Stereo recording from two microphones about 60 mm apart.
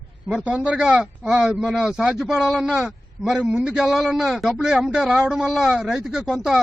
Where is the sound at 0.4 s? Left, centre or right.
Right; by 3.3 s centre.